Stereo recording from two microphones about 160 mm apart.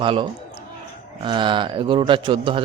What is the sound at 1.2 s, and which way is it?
A man's voice, 30° right (ahead or behind).